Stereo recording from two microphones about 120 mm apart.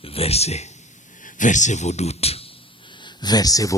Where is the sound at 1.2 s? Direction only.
90° left.